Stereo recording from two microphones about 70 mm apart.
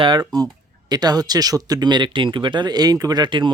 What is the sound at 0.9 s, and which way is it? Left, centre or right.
Speech, right.